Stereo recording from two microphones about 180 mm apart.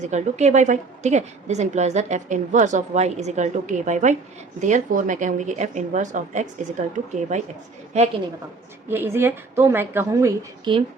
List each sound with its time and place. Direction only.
0.0 s a woman's voice: 40° right (ahead or behind)
8.9 s a woman's voice: 15° right (ahead or behind)